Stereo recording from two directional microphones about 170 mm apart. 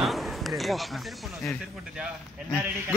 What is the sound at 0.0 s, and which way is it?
Speech, centre (ahead or behind).